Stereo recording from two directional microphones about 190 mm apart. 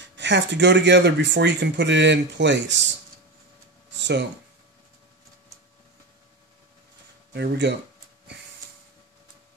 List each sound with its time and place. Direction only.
0.1 s speech: 70° right (ahead or behind)
4.0 s speech: 65° right (ahead or behind)
7.3 s speech: 65° right (ahead or behind)